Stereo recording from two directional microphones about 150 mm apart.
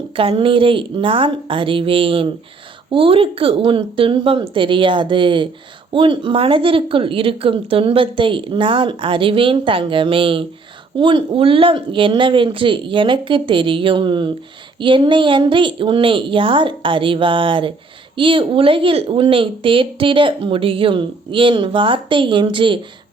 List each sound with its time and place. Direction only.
0.2 s speech: 35° right (ahead or behind)